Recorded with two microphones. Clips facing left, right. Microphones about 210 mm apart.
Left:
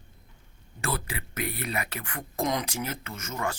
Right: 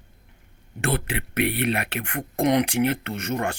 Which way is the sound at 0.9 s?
65° right (ahead or behind).